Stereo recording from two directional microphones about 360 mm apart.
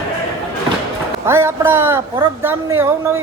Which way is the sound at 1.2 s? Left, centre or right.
Centre.